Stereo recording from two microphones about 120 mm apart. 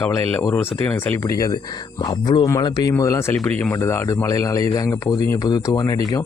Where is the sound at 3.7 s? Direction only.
25° left (ahead or behind).